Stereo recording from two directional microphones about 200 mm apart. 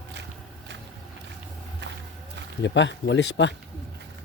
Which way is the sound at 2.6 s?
65° left (ahead or behind).